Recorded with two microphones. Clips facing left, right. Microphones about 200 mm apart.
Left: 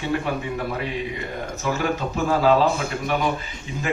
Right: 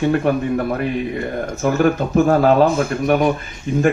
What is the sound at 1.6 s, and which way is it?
A man's voice, 55° right (ahead or behind).